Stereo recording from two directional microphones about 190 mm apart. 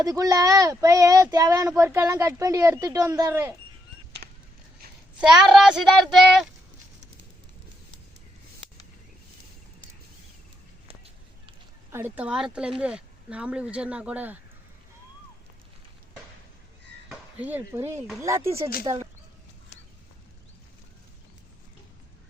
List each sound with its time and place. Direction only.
0.0 s speech: 20° right (ahead or behind)
4.2 s a sound: 40° right (ahead or behind)
5.3 s speech: centre (ahead or behind)
10.8 s a sound: 30° right (ahead or behind)
11.9 s speech: 10° right (ahead or behind)
17.1 s speech: 10° right (ahead or behind)